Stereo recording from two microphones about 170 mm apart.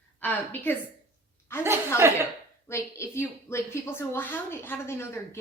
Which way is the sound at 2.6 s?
15° left (ahead or behind).